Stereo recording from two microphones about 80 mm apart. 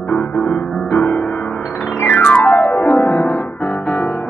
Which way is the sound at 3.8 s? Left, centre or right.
Centre.